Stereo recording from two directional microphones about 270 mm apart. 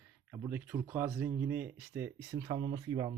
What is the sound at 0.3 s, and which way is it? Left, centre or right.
Speech, centre.